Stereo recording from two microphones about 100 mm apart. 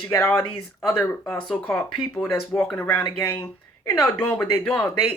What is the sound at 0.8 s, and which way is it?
Speech, 25° left (ahead or behind).